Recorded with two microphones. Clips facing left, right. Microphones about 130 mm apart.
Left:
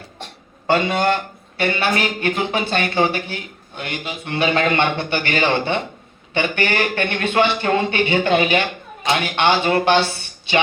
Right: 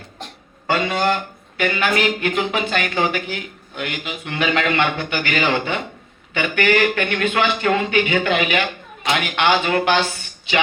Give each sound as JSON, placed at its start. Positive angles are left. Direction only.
{"t": 1.5, "sound": "speech", "side_deg": 30}